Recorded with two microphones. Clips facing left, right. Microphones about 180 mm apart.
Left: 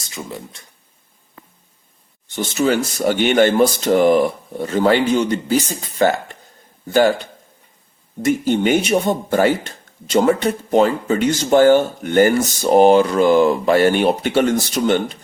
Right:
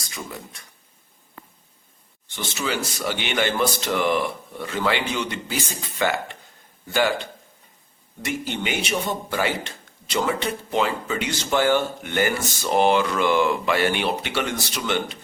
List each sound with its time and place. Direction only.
0.0 s speech: 25° left (ahead or behind)
2.3 s a man's voice: 45° left (ahead or behind)
8.2 s speech: 45° left (ahead or behind)